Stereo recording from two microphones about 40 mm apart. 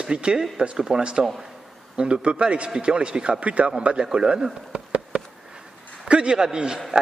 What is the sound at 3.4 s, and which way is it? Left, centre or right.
A man's voice, right.